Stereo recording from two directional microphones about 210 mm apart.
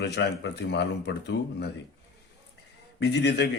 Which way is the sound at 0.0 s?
55° left (ahead or behind).